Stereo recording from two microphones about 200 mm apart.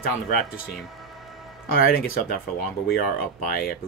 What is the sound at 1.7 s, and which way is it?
Speech, 45° left (ahead or behind).